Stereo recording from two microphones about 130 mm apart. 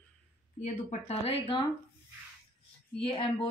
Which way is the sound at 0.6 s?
65° left (ahead or behind).